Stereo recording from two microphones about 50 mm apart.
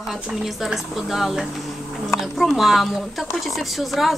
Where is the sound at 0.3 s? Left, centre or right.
Centre.